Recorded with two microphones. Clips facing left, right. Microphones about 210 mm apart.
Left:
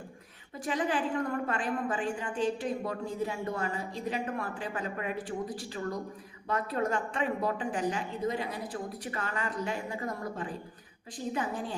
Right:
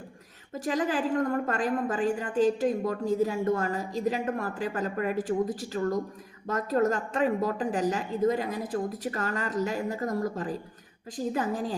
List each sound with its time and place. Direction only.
0.5 s a woman's voice: 40° right (ahead or behind)